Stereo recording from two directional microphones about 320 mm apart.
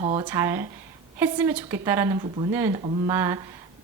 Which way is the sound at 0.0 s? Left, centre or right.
Centre.